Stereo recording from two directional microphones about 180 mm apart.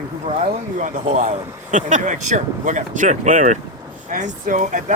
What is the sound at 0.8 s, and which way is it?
Speech, 45° right (ahead or behind).